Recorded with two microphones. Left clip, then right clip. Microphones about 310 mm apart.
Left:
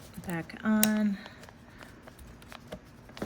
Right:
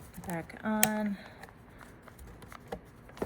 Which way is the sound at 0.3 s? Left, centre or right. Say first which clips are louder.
Left 3 dB; left.